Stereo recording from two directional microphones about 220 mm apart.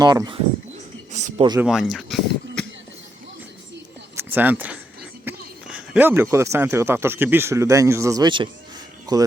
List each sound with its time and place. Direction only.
0.0 s speech: 20° right (ahead or behind)
1.1 s a man's voice: 30° right (ahead or behind)
1.6 s speech: centre (ahead or behind)
4.1 s a sound: 10° right (ahead or behind)
5.6 s speech: 5° right (ahead or behind)